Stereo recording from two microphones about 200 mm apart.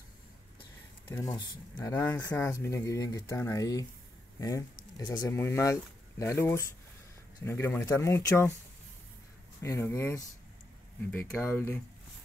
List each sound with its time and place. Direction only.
1.1 s speech: 20° left (ahead or behind)
9.6 s speech: 15° left (ahead or behind)